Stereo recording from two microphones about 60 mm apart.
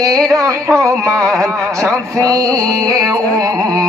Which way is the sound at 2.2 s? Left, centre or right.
Right.